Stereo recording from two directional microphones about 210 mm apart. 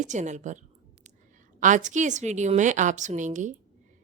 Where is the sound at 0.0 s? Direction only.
35° right (ahead or behind).